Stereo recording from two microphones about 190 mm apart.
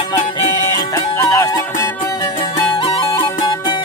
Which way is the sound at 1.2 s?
15° left (ahead or behind).